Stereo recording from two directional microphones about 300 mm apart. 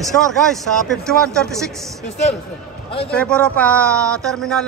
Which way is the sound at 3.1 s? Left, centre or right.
Centre.